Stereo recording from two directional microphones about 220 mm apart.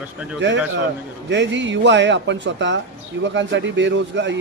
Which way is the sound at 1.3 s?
55° right (ahead or behind).